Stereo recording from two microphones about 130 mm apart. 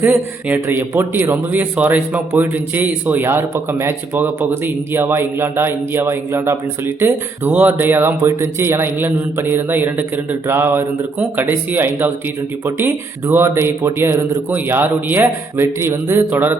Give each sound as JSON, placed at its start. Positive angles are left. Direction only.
{"t": 0.0, "sound": "a man's voice", "side_deg": -15}